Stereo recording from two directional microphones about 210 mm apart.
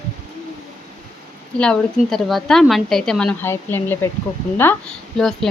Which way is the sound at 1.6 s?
5° left (ahead or behind).